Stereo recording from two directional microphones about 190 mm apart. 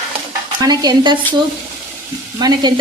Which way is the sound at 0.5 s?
20° right (ahead or behind).